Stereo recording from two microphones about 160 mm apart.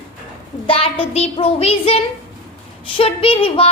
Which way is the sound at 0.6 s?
35° left (ahead or behind).